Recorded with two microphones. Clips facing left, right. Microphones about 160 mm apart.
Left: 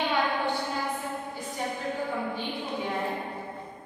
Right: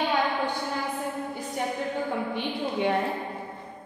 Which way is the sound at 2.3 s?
75° right (ahead or behind).